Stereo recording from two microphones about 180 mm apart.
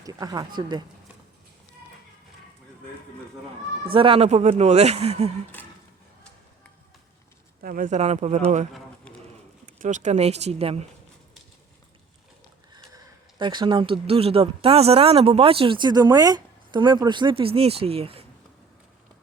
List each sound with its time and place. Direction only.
0.0 s speech: 20° right (ahead or behind)
3.8 s speech: 30° right (ahead or behind)
7.6 s speech: 50° right (ahead or behind)
9.6 s speech: 45° right (ahead or behind)
13.4 s speech: 25° right (ahead or behind)